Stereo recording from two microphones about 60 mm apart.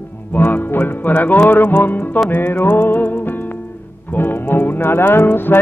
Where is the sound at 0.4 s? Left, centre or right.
Left.